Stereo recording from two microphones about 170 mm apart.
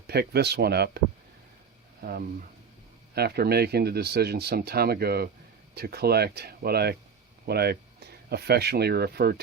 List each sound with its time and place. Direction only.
0.1 s speech: 70° right (ahead or behind)